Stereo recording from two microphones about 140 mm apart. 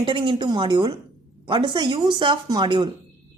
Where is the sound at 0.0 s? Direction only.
35° right (ahead or behind).